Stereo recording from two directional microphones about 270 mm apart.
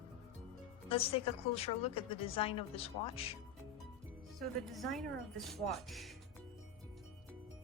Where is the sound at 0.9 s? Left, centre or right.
Left.